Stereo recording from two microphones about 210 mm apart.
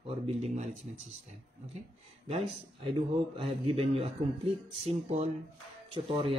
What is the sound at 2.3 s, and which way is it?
Speech, 30° right (ahead or behind).